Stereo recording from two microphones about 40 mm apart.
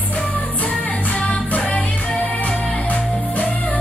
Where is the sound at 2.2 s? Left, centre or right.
Left.